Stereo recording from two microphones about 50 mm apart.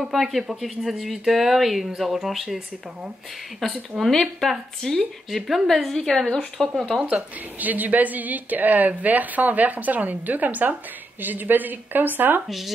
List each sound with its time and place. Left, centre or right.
0.0 s speech: centre
3.6 s speech: centre
7.6 s a woman's voice: right
12.4 s speech: centre